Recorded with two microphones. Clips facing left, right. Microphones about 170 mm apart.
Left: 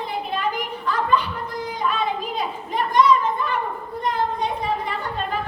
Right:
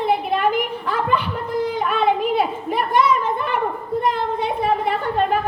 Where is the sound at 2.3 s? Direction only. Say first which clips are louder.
Right 5 dB; 60° right (ahead or behind).